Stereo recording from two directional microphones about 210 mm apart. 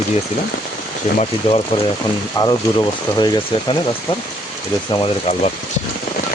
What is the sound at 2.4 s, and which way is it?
Speech, 20° left (ahead or behind).